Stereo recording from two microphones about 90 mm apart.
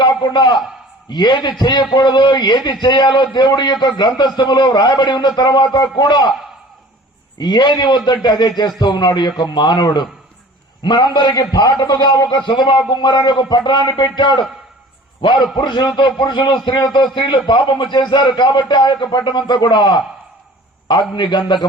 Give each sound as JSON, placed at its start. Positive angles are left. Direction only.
{"t": 0.0, "sound": "a man's voice", "side_deg": 55}
{"t": 7.3, "sound": "a man's voice", "side_deg": 55}
{"t": 12.4, "sound": "a man's voice", "side_deg": 60}